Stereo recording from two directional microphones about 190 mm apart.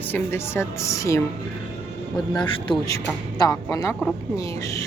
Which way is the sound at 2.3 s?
25° left (ahead or behind).